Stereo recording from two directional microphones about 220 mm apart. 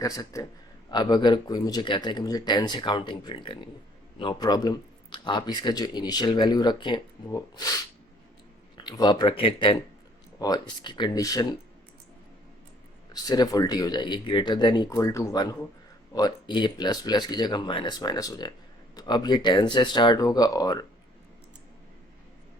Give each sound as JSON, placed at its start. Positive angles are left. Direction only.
{"t": 0.0, "sound": "speech", "side_deg": 15}
{"t": 8.8, "sound": "speech", "side_deg": 20}
{"t": 13.2, "sound": "speech", "side_deg": 15}